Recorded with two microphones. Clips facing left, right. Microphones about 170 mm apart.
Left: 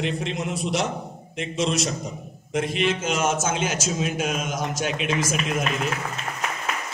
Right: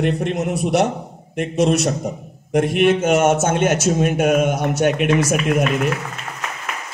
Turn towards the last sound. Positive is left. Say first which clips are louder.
# right 8 dB
turn(degrees=-65)  # may be behind; listen again after turning